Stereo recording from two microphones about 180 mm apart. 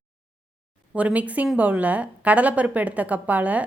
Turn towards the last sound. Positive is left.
turn(degrees=-10)  # may be behind; listen again after turning